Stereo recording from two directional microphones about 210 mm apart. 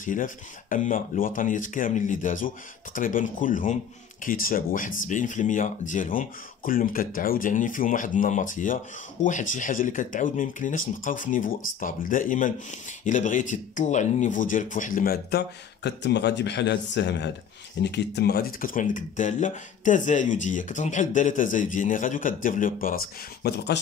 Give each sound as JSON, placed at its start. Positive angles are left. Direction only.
{"t": 0.0, "sound": "speech", "side_deg": 40}